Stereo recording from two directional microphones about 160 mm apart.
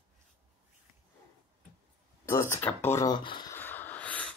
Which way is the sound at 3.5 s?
10° left (ahead or behind).